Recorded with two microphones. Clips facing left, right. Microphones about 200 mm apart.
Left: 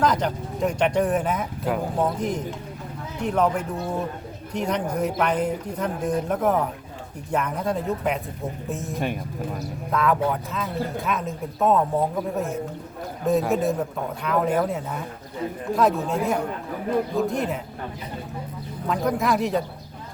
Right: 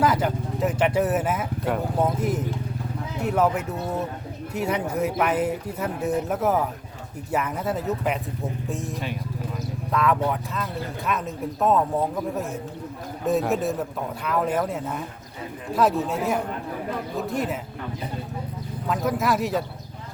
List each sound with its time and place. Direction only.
0.0 s speech: 5° right (ahead or behind)
3.2 s speech: 5° right (ahead or behind)
9.0 s music: 50° left (ahead or behind)
9.9 s speech: centre (ahead or behind)
18.9 s speech: centre (ahead or behind)